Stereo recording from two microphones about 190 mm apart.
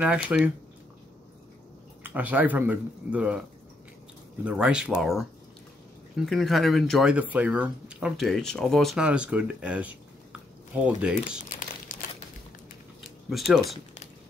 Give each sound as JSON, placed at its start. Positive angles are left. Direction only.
{"t": 0.0, "sound": "speech", "side_deg": -5}
{"t": 2.0, "sound": "speech", "side_deg": -10}
{"t": 4.5, "sound": "speech", "side_deg": -5}
{"t": 11.9, "sound": "crumpling", "side_deg": 45}
{"t": 13.3, "sound": "speech", "side_deg": 0}